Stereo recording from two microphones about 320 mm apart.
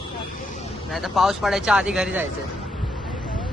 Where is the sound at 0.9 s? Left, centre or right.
Centre.